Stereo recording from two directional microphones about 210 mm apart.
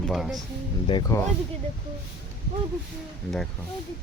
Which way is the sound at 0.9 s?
20° left (ahead or behind).